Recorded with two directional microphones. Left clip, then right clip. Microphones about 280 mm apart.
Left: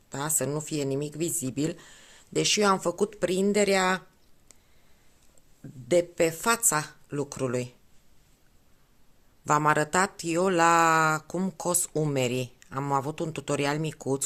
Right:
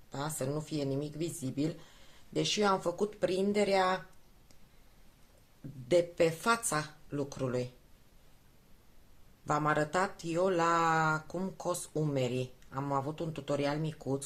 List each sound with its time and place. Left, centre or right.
0.1 s speech: left
5.9 s speech: left
9.5 s speech: left